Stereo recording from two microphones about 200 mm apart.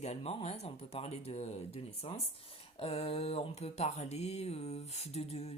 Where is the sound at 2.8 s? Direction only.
30° left (ahead or behind).